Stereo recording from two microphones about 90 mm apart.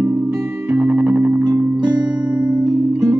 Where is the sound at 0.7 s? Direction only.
20° right (ahead or behind).